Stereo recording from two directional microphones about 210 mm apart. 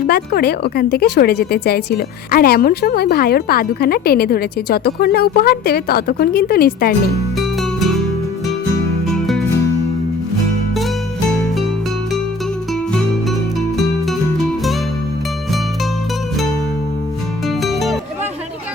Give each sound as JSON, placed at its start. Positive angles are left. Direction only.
{"t": 0.1, "sound": "a woman's voice", "side_deg": 45}
{"t": 7.3, "sound": "music", "side_deg": 0}
{"t": 9.0, "sound": "music", "side_deg": 0}
{"t": 17.6, "sound": "music", "side_deg": 0}